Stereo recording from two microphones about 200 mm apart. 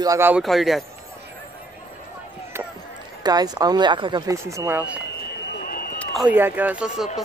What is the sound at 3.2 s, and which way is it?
A man's voice, 20° right (ahead or behind).